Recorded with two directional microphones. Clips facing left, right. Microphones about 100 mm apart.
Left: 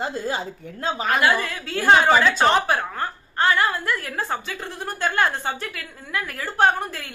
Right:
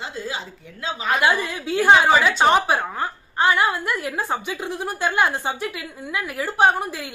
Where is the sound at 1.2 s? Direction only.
15° right (ahead or behind).